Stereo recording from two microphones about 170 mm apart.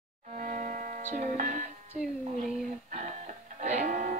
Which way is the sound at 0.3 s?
45° right (ahead or behind).